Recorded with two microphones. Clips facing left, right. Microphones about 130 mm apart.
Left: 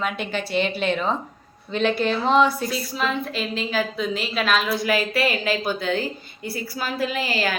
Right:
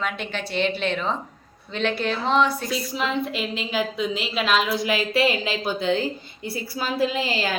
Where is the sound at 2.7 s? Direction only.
20° right (ahead or behind).